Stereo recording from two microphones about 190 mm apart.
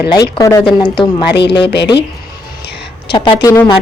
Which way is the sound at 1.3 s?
65° left (ahead or behind).